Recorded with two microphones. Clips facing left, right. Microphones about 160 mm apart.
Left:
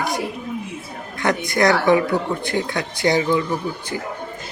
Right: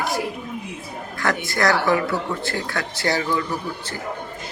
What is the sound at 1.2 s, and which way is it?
Speech, 20° left (ahead or behind).